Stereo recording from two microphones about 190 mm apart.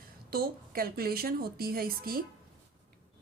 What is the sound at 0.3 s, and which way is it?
Speech, 50° right (ahead or behind).